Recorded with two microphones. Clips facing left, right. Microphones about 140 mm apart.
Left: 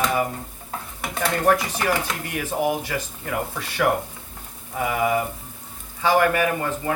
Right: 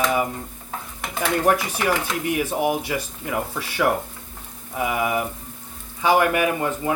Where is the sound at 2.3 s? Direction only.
15° right (ahead or behind).